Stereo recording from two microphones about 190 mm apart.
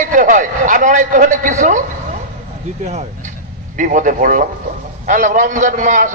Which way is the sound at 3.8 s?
45° right (ahead or behind).